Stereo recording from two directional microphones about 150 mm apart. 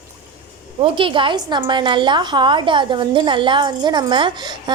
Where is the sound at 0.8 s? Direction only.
35° right (ahead or behind).